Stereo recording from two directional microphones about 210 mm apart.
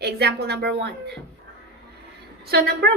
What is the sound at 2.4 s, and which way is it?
Speech, 50° right (ahead or behind).